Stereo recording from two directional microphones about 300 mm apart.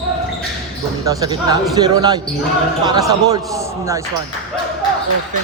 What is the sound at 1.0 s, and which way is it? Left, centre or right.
Speech, centre.